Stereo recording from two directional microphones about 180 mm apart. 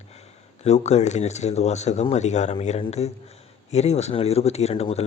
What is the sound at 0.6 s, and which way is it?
Speech, 35° left (ahead or behind).